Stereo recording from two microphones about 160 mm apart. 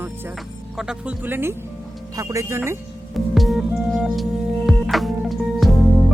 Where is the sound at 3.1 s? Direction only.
Centre (ahead or behind).